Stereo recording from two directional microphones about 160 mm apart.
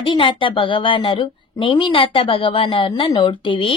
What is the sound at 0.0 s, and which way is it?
A woman's voice, 30° left (ahead or behind).